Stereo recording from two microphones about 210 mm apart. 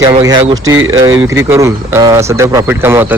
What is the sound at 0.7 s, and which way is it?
Speech, 70° right (ahead or behind).